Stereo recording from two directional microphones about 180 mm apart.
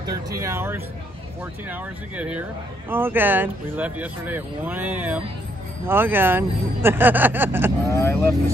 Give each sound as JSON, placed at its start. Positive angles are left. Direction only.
{"t": 0.0, "sound": "speech", "side_deg": -20}
{"t": 7.9, "sound": "speech", "side_deg": 15}